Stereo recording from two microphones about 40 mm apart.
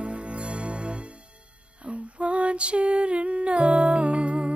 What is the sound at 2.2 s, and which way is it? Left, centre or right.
Music, right.